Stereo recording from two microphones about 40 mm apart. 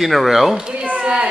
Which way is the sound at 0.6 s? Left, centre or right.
Right.